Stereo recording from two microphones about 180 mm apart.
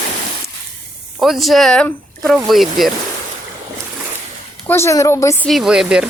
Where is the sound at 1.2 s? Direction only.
Centre (ahead or behind).